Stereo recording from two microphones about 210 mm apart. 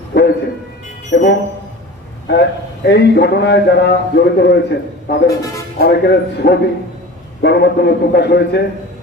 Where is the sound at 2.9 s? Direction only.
50° left (ahead or behind).